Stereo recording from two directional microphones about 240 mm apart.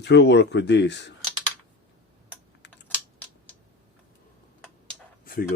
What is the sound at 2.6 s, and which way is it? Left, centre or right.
Typing, left.